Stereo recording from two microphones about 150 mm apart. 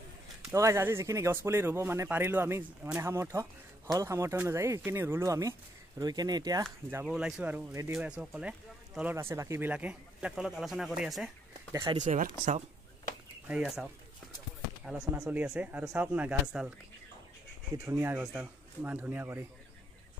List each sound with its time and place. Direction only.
0.6 s speech: 20° right (ahead or behind)
7.1 s speech: 5° right (ahead or behind)
7.7 s speech: 20° right (ahead or behind)
9.1 s speech: 20° right (ahead or behind); by 11.3 s centre (ahead or behind)
11.7 s speech: 25° right (ahead or behind)
12.2 s speech: 55° right (ahead or behind)
13.5 s speech: 5° right (ahead or behind)
15.2 s speech: 5° right (ahead or behind)
17.8 s speech: 15° right (ahead or behind)